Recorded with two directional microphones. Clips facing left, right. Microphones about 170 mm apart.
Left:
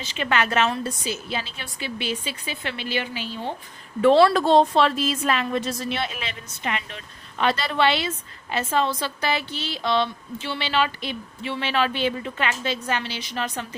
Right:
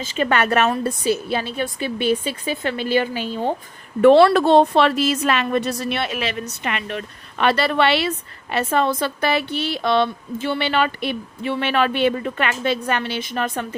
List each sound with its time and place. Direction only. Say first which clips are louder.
0.0 s a woman's voice: right 5 dB; 45° right (ahead or behind)
4.0 s a woman's voice: right 5 dB; 60° right (ahead or behind)